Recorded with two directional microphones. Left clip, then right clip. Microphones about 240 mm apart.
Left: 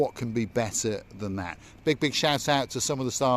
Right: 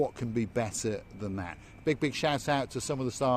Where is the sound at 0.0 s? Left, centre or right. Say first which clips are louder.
Left 3 dB; left.